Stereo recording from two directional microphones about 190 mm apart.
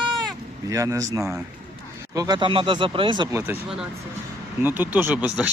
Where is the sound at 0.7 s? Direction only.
15° right (ahead or behind).